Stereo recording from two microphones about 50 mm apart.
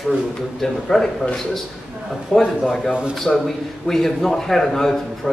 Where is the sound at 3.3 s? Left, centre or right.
Centre.